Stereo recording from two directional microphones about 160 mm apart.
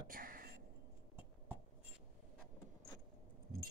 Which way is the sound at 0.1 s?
65° right (ahead or behind).